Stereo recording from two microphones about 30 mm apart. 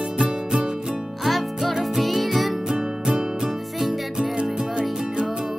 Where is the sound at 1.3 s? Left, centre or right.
Centre.